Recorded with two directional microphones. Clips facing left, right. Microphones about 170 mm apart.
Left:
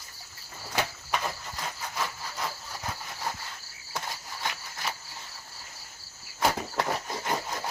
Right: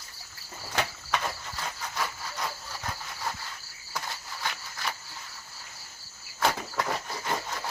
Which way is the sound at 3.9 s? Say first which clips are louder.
Even; 25° left (ahead or behind).